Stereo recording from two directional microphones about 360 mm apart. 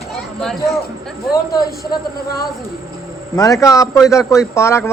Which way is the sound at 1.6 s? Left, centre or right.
Left.